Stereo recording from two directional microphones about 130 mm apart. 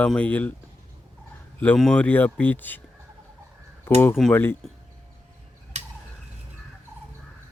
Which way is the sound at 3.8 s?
15° left (ahead or behind).